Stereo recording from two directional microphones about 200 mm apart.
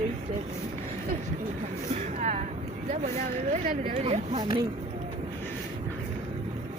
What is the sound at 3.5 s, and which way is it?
Speech, 40° right (ahead or behind).